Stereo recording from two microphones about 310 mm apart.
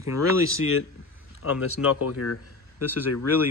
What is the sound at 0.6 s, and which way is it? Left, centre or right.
Speech, left.